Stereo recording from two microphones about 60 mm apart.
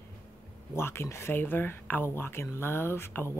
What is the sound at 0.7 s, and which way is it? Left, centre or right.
Speech, left.